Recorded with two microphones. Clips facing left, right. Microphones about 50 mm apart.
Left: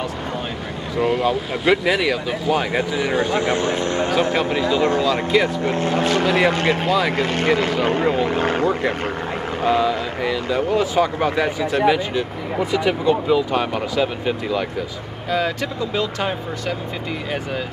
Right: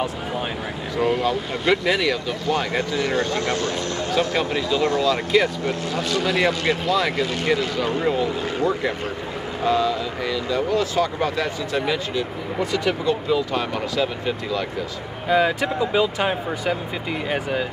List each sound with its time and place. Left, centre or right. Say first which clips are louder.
0.9 s speech: left 2 dB; centre; by 5.0 s left
5.0 s speech: left 1 dB; centre
5.6 s speech: left 5 dB; left
6.9 s speech: even; centre
7.2 s speech: left 3 dB; left
8.3 s speech: left 4 dB; left
9.7 s speech: left 2 dB; centre
15.2 s speech: right 3 dB; centre